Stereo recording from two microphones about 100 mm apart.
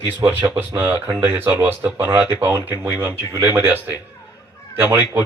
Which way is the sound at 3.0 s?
25° left (ahead or behind).